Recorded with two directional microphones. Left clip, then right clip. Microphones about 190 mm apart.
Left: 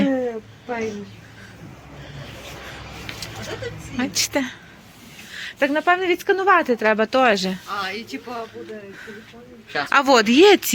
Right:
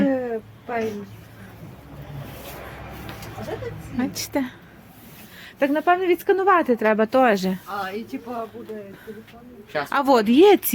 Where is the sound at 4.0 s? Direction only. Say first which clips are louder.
Left 4 dB; 10° right (ahead or behind).